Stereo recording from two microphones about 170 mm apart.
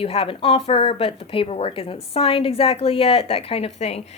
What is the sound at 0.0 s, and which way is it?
Speech, 35° left (ahead or behind).